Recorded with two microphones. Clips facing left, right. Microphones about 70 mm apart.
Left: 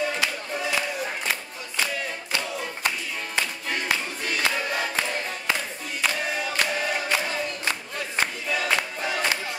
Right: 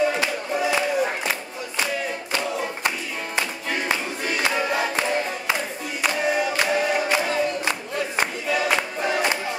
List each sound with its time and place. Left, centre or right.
0.2 s a sound: centre
2.3 s choir: centre
3.3 s music: centre
6.0 s choir: centre
8.5 s music: centre